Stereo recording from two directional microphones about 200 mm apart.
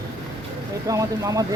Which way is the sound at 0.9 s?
15° right (ahead or behind).